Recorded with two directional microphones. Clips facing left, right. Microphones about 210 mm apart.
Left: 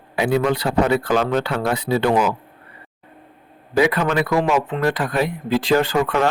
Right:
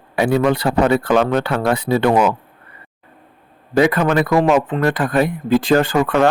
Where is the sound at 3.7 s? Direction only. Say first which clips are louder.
Right 3 dB; 45° right (ahead or behind).